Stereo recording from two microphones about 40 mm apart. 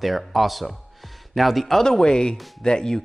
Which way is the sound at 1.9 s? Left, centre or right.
Centre.